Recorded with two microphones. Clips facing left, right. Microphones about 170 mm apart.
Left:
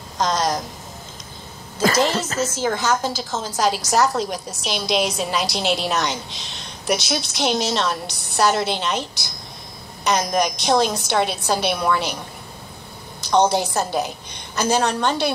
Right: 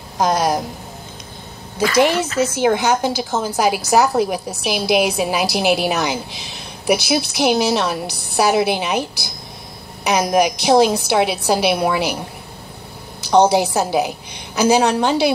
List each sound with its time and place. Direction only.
0.2 s speech: 60° right (ahead or behind)
2.0 s a woman's voice: 65° right (ahead or behind)